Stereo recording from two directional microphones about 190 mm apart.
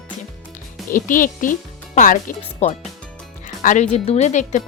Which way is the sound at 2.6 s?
35° left (ahead or behind).